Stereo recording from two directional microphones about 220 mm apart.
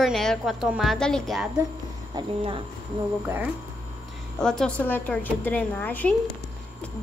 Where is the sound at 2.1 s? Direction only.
25° right (ahead or behind).